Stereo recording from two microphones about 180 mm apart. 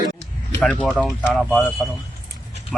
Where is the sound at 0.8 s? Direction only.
5° right (ahead or behind).